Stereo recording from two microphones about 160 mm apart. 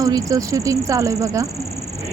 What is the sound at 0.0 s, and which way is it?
Speech, 20° right (ahead or behind).